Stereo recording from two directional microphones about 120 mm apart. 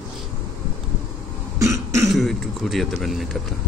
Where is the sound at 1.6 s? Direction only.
25° right (ahead or behind).